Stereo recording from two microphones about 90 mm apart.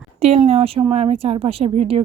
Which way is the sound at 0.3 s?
90° right.